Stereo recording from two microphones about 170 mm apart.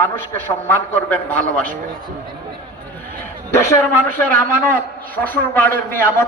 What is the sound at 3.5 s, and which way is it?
A man's voice, 15° left (ahead or behind).